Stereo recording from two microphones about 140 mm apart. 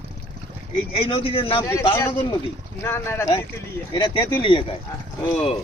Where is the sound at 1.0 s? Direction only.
40° left (ahead or behind).